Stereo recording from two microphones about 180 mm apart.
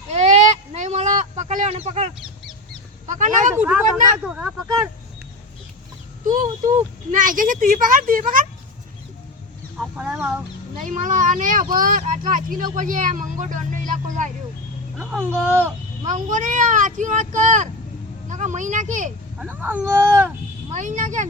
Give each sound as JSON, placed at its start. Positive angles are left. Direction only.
{"t": 0.1, "sound": "a sound", "side_deg": -35}
{"t": 3.1, "sound": "speech", "side_deg": -45}
{"t": 4.3, "sound": "speech", "side_deg": -5}
{"t": 6.2, "sound": "speech", "side_deg": -45}
{"t": 9.7, "sound": "speech", "side_deg": -5}
{"t": 10.8, "sound": "speech", "side_deg": -45}
{"t": 14.9, "sound": "speech", "side_deg": -10}
{"t": 16.0, "sound": "speech", "side_deg": -45}
{"t": 19.4, "sound": "speech", "side_deg": -10}
{"t": 20.7, "sound": "speech", "side_deg": -45}